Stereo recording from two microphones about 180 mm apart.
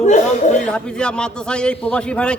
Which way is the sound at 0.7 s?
5° left (ahead or behind).